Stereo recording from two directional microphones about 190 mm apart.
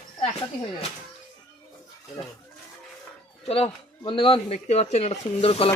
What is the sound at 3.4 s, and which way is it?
Speech, 30° left (ahead or behind).